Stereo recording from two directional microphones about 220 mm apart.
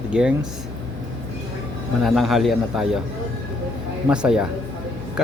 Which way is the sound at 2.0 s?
Centre (ahead or behind).